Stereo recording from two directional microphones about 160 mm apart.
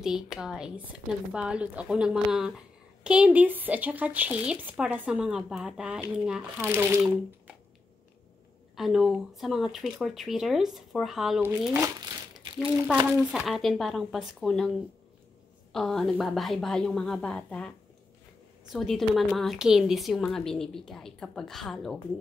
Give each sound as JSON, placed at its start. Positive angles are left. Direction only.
{"t": 0.0, "sound": "a woman's voice", "side_deg": -5}
{"t": 8.7, "sound": "a woman's voice", "side_deg": 0}
{"t": 11.4, "sound": "speech", "side_deg": -10}
{"t": 12.4, "sound": "a sound", "side_deg": -30}
{"t": 12.9, "sound": "a woman's voice", "side_deg": -5}
{"t": 15.7, "sound": "a woman's voice", "side_deg": 0}